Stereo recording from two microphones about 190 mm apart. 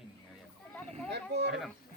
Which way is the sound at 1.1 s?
60° right (ahead or behind).